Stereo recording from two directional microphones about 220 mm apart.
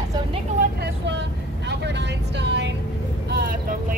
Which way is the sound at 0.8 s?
50° right (ahead or behind).